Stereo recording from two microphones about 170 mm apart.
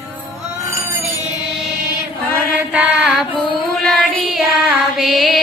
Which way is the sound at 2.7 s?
5° right (ahead or behind).